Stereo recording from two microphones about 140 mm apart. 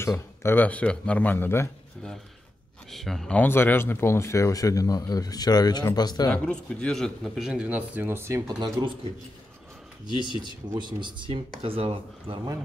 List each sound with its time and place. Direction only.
0.0 s speech: 20° left (ahead or behind)
2.9 s speech: centre (ahead or behind); by 6.3 s 30° left (ahead or behind)
6.3 s a man's voice: 10° left (ahead or behind); by 8.4 s 15° right (ahead or behind)
8.5 s speech: 25° right (ahead or behind)
10.0 s speech: 35° left (ahead or behind)
10.8 s speech: 35° right (ahead or behind)